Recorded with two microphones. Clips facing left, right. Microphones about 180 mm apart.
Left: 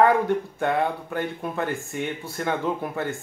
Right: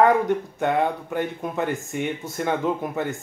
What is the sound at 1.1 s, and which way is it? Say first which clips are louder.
Speech: right 2 dB; 15° right (ahead or behind).